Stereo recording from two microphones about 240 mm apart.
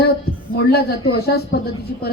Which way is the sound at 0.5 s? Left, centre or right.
Left.